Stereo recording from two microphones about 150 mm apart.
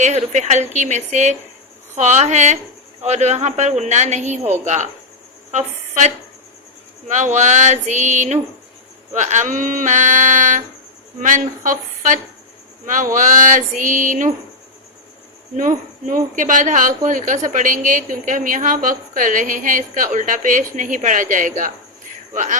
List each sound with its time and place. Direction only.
0.0 s a woman's voice: 50° right (ahead or behind)
7.1 s a woman's voice: 55° right (ahead or behind)
15.5 s a woman's voice: 60° right (ahead or behind)